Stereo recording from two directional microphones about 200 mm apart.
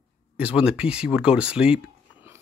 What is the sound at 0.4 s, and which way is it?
Speech, 5° right (ahead or behind).